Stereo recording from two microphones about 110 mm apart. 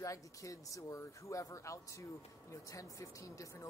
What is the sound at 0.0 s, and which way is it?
Speech, 30° left (ahead or behind).